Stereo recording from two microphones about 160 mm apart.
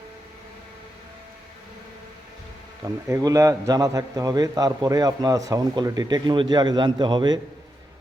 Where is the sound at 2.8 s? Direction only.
20° right (ahead or behind).